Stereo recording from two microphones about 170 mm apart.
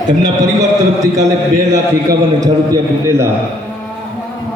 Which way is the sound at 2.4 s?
20° right (ahead or behind).